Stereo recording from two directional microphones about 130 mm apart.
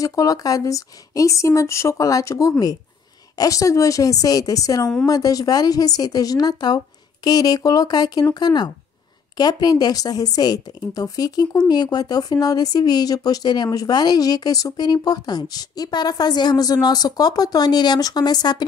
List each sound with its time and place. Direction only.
0.0 s speech: 25° left (ahead or behind)